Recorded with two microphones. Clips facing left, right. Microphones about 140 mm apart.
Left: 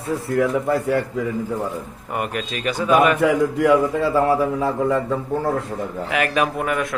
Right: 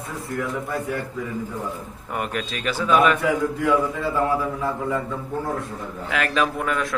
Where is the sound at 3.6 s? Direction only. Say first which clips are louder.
Left 5 dB; 90° left.